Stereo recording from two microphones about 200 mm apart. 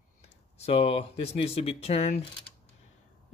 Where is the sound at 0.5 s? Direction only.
30° left (ahead or behind).